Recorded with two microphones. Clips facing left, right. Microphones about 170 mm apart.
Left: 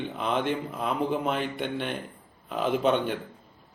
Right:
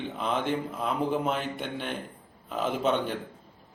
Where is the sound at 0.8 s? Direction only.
Centre (ahead or behind).